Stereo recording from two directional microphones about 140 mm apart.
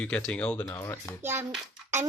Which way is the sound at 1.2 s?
15° right (ahead or behind).